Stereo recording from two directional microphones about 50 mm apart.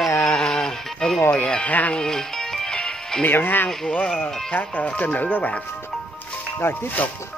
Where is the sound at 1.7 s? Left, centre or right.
Left.